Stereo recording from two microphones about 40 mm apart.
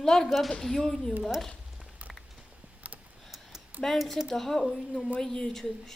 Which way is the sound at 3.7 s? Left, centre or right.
Right.